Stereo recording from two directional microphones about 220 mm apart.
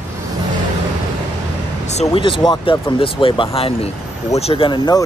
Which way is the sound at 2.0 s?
25° left (ahead or behind).